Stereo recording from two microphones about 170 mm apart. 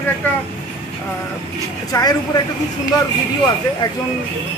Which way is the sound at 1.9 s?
20° left (ahead or behind).